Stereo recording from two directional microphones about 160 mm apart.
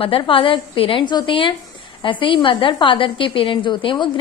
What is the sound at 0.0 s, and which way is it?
A woman's voice, 35° left (ahead or behind).